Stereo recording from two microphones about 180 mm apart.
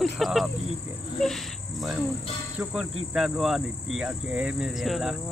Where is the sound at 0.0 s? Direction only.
Centre (ahead or behind).